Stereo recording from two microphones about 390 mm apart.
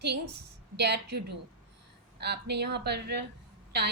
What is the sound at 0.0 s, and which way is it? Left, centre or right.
A woman's voice, right.